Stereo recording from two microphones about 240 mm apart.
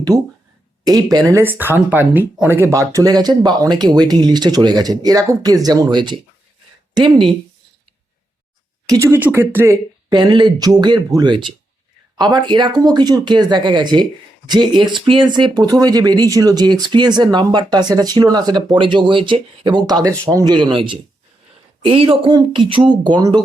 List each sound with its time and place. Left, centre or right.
0.1 s speech: centre
8.9 s speech: centre